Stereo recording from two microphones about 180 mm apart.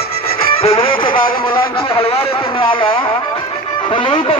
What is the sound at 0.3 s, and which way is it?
Music, 35° left (ahead or behind).